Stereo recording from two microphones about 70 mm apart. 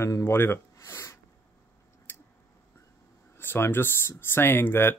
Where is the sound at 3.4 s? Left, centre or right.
Left.